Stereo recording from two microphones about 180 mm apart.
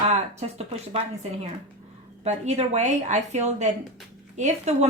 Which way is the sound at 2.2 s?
35° right (ahead or behind).